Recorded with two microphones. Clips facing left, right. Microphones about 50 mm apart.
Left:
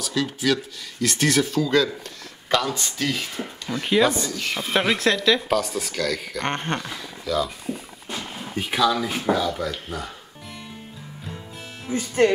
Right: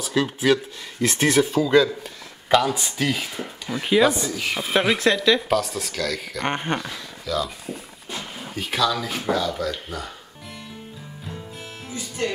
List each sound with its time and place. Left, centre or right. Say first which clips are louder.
0.0 s speech: right 3 dB; centre
11.2 s music: right 1 dB; centre
11.9 s speech: left 9 dB; left